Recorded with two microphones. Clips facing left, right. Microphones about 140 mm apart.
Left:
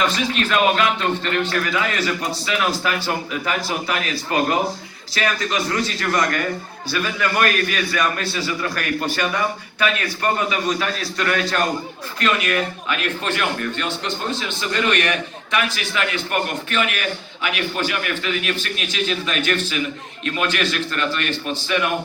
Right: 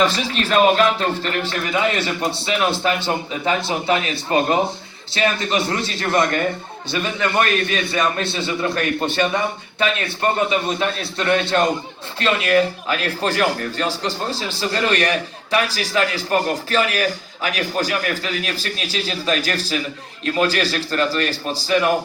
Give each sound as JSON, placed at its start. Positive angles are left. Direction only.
{"t": 0.0, "sound": "a man's voice", "side_deg": -30}